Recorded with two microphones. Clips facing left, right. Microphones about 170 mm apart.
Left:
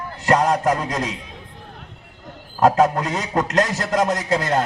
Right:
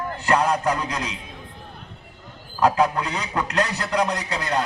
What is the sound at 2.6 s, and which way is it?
A man's voice, 45° left (ahead or behind).